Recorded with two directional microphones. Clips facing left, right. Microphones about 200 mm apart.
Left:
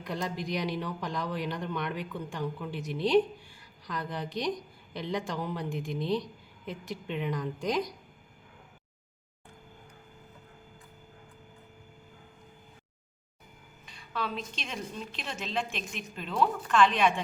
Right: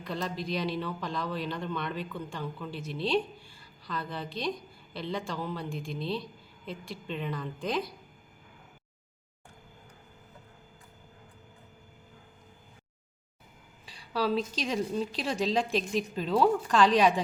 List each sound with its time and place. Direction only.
0.0 s speech: 15° left (ahead or behind)
13.8 s a woman's voice: 35° right (ahead or behind)